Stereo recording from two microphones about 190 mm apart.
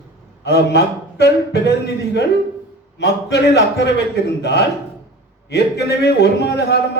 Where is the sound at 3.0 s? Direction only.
65° left (ahead or behind).